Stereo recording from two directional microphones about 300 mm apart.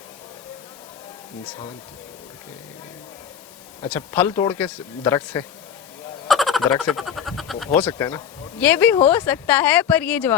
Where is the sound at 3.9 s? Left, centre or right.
Centre.